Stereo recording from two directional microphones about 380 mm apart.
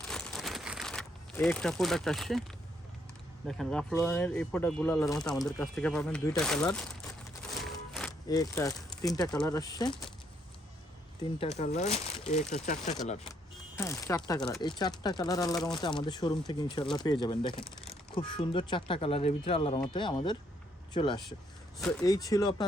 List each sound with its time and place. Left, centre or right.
0.1 s crumpling: centre
3.4 s speech: centre
11.3 s speech: centre